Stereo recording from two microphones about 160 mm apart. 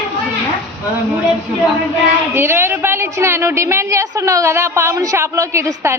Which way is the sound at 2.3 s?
15° right (ahead or behind).